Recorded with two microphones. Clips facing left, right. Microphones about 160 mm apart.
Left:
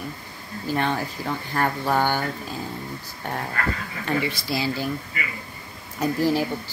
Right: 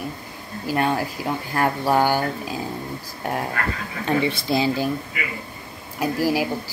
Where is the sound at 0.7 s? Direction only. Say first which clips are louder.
Right 3 dB; 10° right (ahead or behind).